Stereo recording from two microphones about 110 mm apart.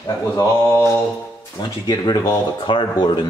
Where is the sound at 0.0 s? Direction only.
30° left (ahead or behind).